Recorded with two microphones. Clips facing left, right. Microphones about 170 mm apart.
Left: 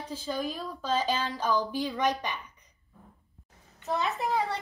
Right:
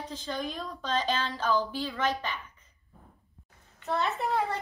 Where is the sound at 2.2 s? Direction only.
15° left (ahead or behind).